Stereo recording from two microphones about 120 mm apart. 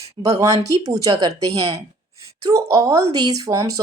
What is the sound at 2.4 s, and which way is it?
Speech, 25° right (ahead or behind).